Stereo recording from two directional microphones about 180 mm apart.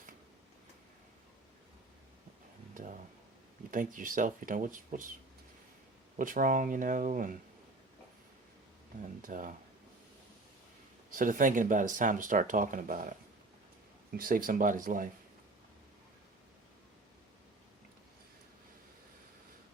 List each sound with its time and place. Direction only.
3.7 s speech: 50° right (ahead or behind)
6.1 s speech: 50° right (ahead or behind)
9.2 s speech: 45° right (ahead or behind)
11.1 s speech: 50° right (ahead or behind)
14.2 s speech: 50° right (ahead or behind)